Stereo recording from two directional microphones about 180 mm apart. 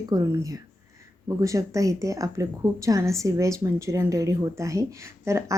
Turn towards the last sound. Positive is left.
turn(degrees=-15)  # may be behind; listen again after turning